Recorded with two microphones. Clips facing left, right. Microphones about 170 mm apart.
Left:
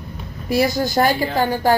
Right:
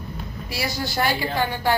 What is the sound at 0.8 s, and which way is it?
Speech, 45° left (ahead or behind).